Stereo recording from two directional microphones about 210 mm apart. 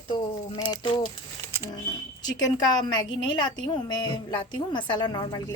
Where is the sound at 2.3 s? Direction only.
20° left (ahead or behind).